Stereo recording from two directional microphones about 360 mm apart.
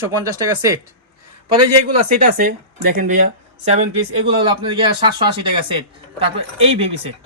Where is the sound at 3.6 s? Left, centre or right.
Centre.